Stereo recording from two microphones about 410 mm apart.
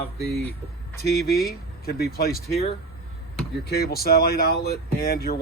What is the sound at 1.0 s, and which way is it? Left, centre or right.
Speech, left.